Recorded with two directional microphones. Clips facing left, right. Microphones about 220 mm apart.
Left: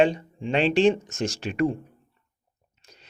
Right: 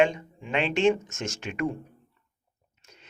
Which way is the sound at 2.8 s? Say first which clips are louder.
Left 1 dB; 35° left (ahead or behind).